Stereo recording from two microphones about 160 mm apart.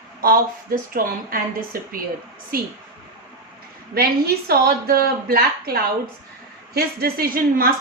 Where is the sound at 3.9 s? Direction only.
75° right (ahead or behind).